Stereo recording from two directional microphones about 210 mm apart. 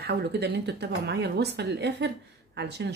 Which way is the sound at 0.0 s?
50° right (ahead or behind).